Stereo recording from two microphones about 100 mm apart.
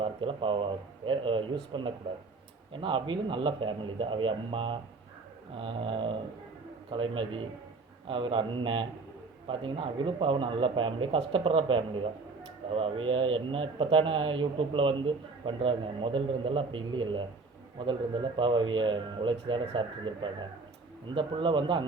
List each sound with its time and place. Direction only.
0.0 s a man's voice: 60° right (ahead or behind)